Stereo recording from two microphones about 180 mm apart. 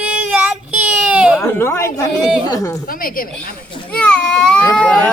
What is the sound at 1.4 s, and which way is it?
Speech, 15° left (ahead or behind).